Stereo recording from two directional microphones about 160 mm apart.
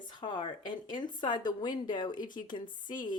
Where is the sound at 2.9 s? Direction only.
30° left (ahead or behind).